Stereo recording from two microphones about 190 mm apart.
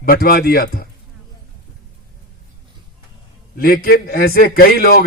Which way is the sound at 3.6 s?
50° left (ahead or behind).